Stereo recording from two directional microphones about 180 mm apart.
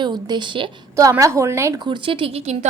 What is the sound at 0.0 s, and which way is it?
A woman's voice, 25° right (ahead or behind).